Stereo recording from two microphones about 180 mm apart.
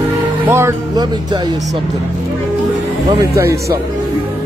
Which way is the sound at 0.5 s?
15° right (ahead or behind).